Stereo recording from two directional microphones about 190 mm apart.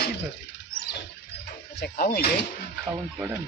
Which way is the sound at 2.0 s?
50° left (ahead or behind).